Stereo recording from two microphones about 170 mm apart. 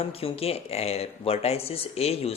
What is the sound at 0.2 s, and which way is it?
Speech, 35° left (ahead or behind).